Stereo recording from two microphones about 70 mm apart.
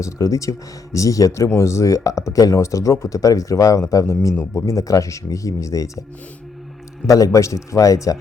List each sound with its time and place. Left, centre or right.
0.0 s speech: left
7.0 s a man's voice: centre
7.3 s speech: left